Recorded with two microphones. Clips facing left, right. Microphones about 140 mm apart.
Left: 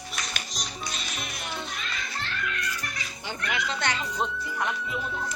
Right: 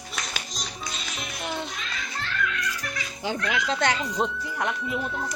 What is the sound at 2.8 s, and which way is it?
A child's voice, 90° right.